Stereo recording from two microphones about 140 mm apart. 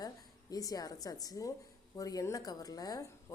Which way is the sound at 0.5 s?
25° left (ahead or behind).